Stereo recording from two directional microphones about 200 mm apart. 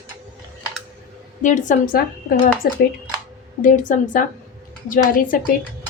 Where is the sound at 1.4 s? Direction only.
40° left (ahead or behind).